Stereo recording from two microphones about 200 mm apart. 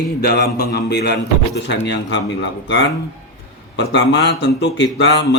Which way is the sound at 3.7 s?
60° left (ahead or behind).